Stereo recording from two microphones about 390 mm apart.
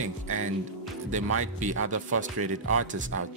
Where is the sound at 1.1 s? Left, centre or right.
Right.